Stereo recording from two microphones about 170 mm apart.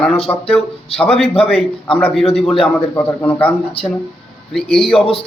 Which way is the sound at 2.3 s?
5° left (ahead or behind).